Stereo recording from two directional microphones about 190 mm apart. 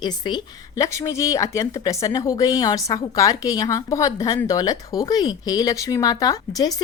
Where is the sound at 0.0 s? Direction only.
25° left (ahead or behind).